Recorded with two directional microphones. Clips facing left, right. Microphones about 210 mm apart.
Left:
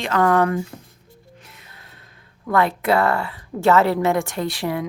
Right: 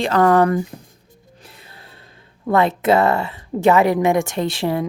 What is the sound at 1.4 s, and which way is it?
Music, 30° right (ahead or behind).